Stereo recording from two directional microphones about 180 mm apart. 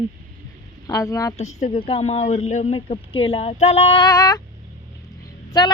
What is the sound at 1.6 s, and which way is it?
Female singing, 40° left (ahead or behind).